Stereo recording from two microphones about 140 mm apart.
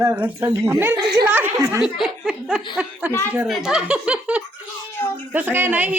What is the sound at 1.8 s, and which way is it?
A woman's voice, 5° right (ahead or behind).